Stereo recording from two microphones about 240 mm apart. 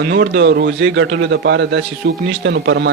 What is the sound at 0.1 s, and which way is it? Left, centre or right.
Speech, right.